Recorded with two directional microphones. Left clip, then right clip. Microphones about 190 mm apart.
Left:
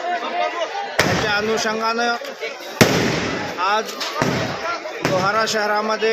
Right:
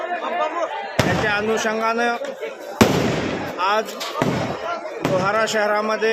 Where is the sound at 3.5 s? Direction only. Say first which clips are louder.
Even; 10° right (ahead or behind).